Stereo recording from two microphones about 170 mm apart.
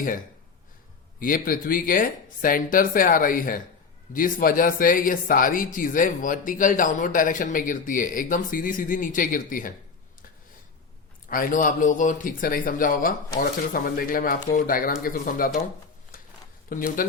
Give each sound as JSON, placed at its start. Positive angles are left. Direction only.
{"t": 1.2, "sound": "speech", "side_deg": 55}
{"t": 11.3, "sound": "speech", "side_deg": 55}
{"t": 16.6, "sound": "speech", "side_deg": 55}